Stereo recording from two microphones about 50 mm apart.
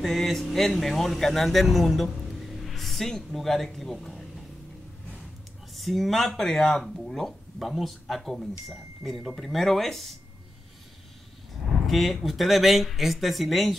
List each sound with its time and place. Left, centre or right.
0.0 s speech: centre
5.8 s speech: centre
11.8 s speech: centre